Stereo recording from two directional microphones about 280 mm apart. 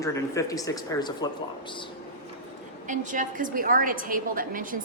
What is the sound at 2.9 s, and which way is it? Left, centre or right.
A woman's voice, right.